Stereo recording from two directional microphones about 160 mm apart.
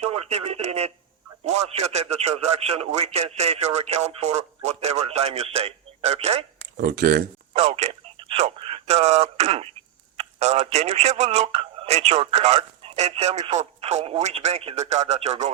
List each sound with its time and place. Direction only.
0.0 s speech: 40° right (ahead or behind)
6.7 s speech: 70° right (ahead or behind)
7.5 s speech: 40° right (ahead or behind)